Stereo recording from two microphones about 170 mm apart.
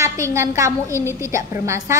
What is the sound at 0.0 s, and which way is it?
A woman's voice, 15° right (ahead or behind).